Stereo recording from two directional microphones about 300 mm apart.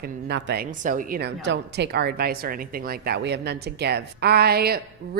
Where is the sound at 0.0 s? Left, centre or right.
Right.